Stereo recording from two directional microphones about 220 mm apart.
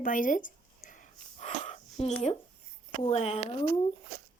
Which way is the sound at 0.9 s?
35° left (ahead or behind).